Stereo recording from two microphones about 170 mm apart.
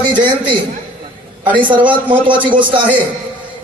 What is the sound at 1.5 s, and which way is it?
Speech, 30° right (ahead or behind).